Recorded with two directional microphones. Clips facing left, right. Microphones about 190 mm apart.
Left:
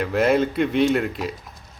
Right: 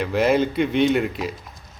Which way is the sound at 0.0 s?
Centre (ahead or behind).